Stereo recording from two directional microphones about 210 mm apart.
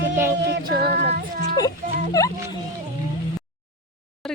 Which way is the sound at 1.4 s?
15° left (ahead or behind).